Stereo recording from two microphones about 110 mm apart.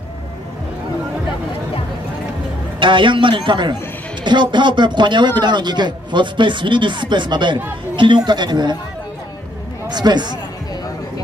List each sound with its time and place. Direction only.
2.8 s speech: 50° right (ahead or behind)
7.9 s chatter: 45° right (ahead or behind)
8.3 s speech: 40° right (ahead or behind)
9.8 s speech: 40° right (ahead or behind)